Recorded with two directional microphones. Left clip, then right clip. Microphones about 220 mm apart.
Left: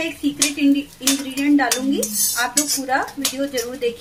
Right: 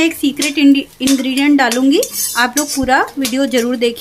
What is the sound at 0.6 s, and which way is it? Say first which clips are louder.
Speech: right 7 dB; 45° right (ahead or behind).